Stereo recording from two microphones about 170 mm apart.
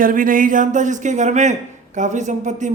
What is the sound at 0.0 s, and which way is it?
Speech, 55° right (ahead or behind).